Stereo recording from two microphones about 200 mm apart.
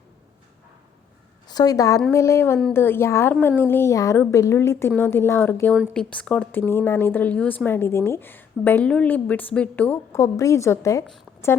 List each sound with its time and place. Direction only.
1.5 s a woman's voice: 20° left (ahead or behind)
5.7 s a woman's voice: centre (ahead or behind)